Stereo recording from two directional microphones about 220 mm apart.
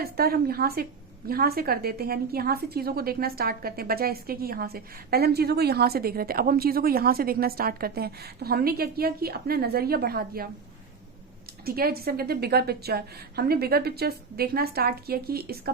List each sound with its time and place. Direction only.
0.0 s a woman's voice: 45° right (ahead or behind)
11.6 s a woman's voice: 45° right (ahead or behind)